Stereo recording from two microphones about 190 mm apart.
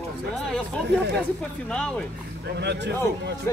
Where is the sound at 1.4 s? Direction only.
5° left (ahead or behind).